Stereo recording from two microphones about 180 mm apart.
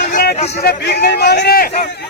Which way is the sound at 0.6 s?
65° left (ahead or behind).